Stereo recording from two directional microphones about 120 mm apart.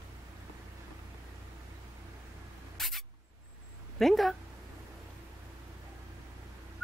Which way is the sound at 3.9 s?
Centre (ahead or behind).